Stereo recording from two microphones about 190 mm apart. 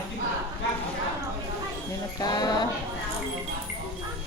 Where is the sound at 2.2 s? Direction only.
20° left (ahead or behind).